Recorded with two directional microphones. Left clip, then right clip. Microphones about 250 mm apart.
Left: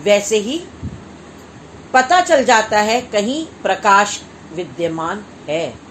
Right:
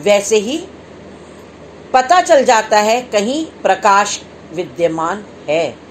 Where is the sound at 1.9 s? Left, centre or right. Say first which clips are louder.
Right 2 dB; centre.